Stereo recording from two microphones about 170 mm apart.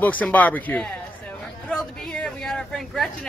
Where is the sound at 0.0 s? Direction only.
10° left (ahead or behind).